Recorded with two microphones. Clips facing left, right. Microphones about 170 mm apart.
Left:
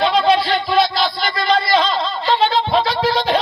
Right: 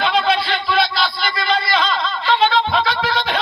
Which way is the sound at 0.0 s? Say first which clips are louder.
Left 3 dB; 35° left (ahead or behind).